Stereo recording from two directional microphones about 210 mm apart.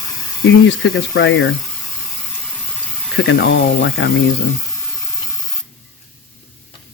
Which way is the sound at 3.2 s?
55° left (ahead or behind).